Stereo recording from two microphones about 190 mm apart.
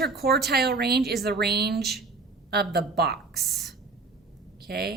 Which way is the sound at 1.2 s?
60° right (ahead or behind).